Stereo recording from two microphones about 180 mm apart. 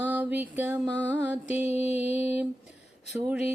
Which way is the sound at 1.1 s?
10° right (ahead or behind).